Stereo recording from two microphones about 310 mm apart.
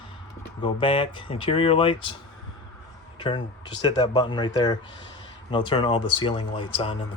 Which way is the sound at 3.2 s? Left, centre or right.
Centre.